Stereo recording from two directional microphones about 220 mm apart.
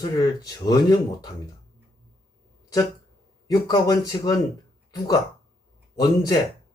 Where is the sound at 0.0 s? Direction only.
15° left (ahead or behind).